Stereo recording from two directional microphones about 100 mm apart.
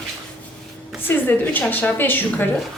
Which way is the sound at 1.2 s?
20° left (ahead or behind).